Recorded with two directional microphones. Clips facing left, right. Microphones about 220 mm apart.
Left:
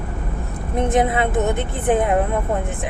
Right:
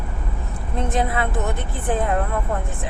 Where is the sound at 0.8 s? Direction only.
20° left (ahead or behind).